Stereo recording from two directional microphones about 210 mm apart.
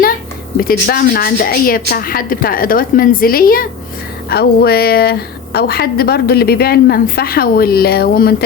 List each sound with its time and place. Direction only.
0.5 s a woman's voice: 45° left (ahead or behind)